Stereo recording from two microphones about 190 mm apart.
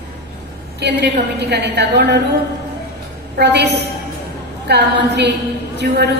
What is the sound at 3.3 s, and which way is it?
A woman's voice, 60° right (ahead or behind).